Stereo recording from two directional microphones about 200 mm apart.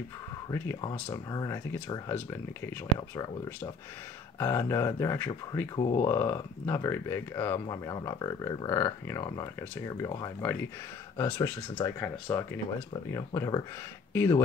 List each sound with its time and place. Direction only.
0.5 s speech: 10° left (ahead or behind)
5.8 s speech: 25° left (ahead or behind)
6.0 s speech: 15° left (ahead or behind)